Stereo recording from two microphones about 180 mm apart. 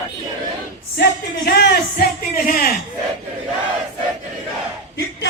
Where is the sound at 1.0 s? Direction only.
60° left (ahead or behind).